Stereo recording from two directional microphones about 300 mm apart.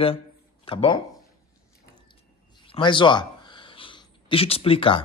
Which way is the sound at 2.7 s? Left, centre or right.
Centre.